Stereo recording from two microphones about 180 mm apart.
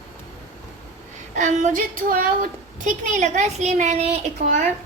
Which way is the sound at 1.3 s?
45° right (ahead or behind).